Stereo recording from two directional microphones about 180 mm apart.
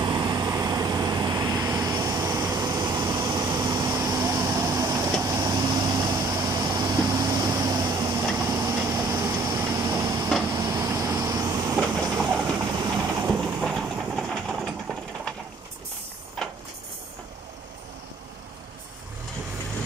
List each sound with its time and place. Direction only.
0.0 s vehicle: 25° right (ahead or behind)
12.2 s train: centre (ahead or behind)
12.4 s train: 20° right (ahead or behind)
13.3 s train: centre (ahead or behind)